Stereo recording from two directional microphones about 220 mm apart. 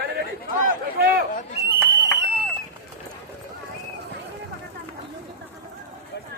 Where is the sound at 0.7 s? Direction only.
45° right (ahead or behind).